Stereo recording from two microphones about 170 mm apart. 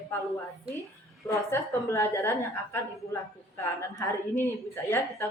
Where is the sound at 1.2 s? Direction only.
15° left (ahead or behind).